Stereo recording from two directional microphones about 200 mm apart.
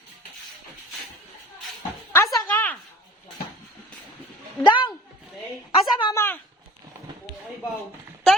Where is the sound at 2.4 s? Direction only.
10° left (ahead or behind).